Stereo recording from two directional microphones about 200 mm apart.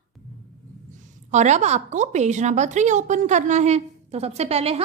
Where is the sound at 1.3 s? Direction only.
35° right (ahead or behind).